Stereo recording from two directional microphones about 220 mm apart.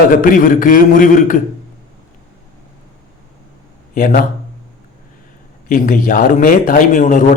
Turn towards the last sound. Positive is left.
turn(degrees=35)  # may be behind; listen again after turning